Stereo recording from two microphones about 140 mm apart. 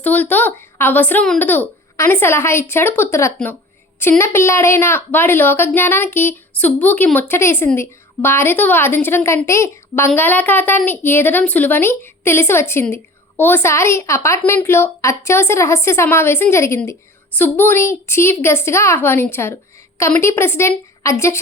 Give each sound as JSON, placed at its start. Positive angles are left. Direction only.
{"t": 0.0, "sound": "a woman's voice", "side_deg": 10}